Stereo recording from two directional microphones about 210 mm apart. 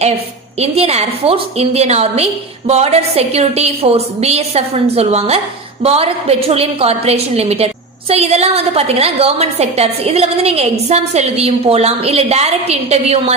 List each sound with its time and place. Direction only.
0.6 s a woman's voice: 30° right (ahead or behind)